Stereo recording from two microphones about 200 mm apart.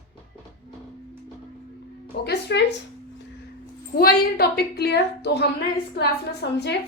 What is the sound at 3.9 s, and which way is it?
A woman's voice, 50° left (ahead or behind).